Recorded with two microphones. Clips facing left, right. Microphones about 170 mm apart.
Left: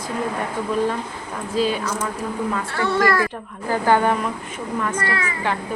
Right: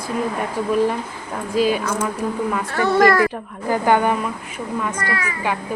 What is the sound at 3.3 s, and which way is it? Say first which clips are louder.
Speech: right 2 dB; 15° right (ahead or behind).